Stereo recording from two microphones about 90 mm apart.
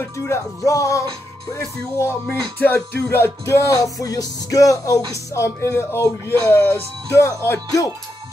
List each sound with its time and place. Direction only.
0.7 s music: 40° left (ahead or behind)
2.0 s speech: 30° left (ahead or behind)
2.6 s music: 25° left (ahead or behind)
6.2 s speech: 25° left (ahead or behind)